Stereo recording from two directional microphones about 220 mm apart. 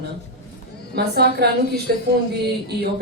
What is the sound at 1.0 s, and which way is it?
A woman's voice, 45° right (ahead or behind).